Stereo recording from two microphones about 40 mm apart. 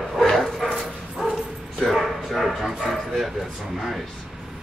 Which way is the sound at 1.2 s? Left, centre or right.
Centre.